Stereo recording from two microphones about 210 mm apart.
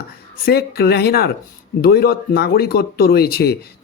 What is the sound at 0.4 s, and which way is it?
Speech, 50° left (ahead or behind).